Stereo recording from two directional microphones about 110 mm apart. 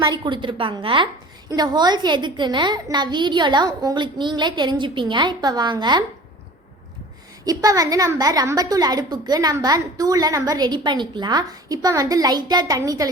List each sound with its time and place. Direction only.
0.0 s a child's voice: 45° right (ahead or behind)
1.5 s a child's voice: 35° right (ahead or behind)
7.4 s a woman's voice: 35° right (ahead or behind)